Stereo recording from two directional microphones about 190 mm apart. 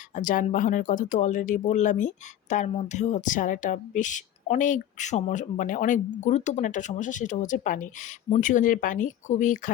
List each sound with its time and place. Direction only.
0.2 s speech: 45° left (ahead or behind)